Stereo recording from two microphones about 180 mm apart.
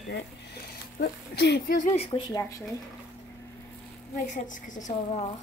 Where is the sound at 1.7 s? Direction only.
40° left (ahead or behind).